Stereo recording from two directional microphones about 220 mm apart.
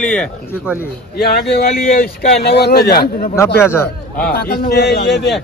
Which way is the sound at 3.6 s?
10° left (ahead or behind).